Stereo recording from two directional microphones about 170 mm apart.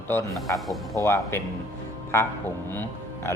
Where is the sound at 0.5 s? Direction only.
Centre (ahead or behind).